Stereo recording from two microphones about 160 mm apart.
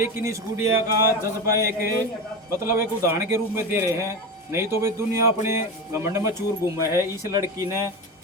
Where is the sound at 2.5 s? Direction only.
15° right (ahead or behind).